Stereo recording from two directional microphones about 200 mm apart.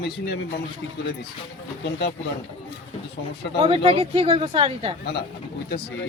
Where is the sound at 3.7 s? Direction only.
30° right (ahead or behind).